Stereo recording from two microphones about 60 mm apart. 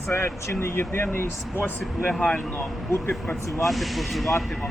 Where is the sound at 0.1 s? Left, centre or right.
Left.